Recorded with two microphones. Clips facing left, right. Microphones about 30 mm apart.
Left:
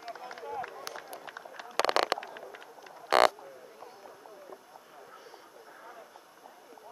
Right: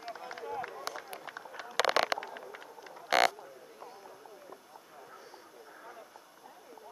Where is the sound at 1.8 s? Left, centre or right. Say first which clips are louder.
Left 1 dB; left.